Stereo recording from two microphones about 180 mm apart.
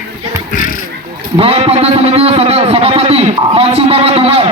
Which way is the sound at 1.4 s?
35° right (ahead or behind).